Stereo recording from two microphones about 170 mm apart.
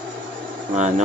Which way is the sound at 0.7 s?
45° right (ahead or behind).